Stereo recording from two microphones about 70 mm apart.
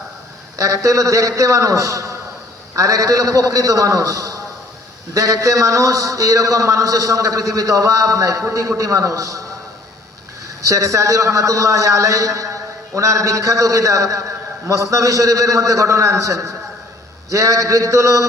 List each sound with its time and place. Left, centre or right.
0.5 s a man's voice: right
10.6 s a man's voice: right